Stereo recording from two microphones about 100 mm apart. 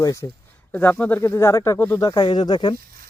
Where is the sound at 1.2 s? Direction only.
30° left (ahead or behind).